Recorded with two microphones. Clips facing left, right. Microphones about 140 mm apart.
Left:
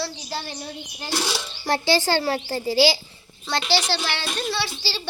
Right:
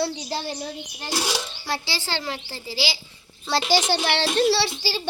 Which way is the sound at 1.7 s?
50° left (ahead or behind).